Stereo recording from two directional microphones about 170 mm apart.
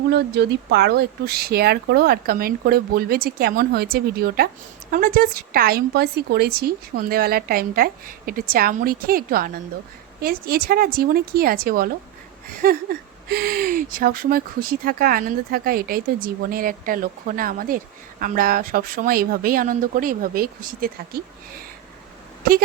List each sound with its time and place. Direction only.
0.1 s speech: 75° right (ahead or behind); by 21.6 s 60° right (ahead or behind)